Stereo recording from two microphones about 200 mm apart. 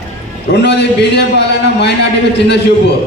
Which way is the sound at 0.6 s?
60° left (ahead or behind).